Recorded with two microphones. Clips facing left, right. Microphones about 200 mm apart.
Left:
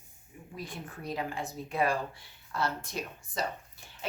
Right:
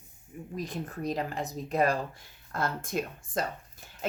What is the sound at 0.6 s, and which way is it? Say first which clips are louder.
Speech: right 6 dB; 40° right (ahead or behind).